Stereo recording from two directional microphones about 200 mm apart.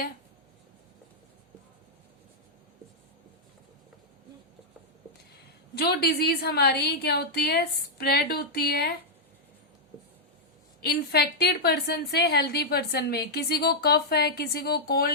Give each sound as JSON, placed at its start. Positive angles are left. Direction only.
{"t": 5.7, "sound": "a woman's voice", "side_deg": 50}
{"t": 10.8, "sound": "a woman's voice", "side_deg": 55}